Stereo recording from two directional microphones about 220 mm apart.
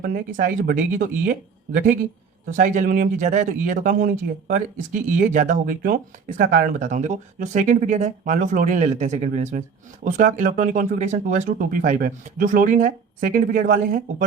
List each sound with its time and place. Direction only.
0.0 s speech: 40° right (ahead or behind)